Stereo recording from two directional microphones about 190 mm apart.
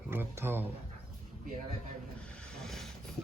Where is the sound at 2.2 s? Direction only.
5° left (ahead or behind).